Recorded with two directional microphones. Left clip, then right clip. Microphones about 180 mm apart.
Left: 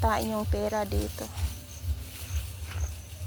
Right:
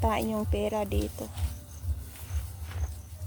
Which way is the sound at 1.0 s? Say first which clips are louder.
Even; 15° right (ahead or behind).